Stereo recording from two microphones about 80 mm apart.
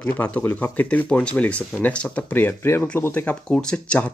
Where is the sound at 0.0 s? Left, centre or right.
Centre.